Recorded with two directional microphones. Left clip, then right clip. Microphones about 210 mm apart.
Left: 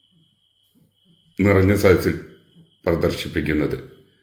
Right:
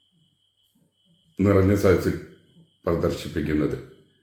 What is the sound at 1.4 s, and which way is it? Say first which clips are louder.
A man's voice: left 3 dB; 30° left (ahead or behind).